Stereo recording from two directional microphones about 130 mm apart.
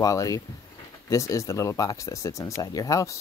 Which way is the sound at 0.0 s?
25° left (ahead or behind).